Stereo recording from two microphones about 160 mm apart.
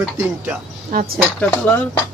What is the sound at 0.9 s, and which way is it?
Speech, 70° right (ahead or behind).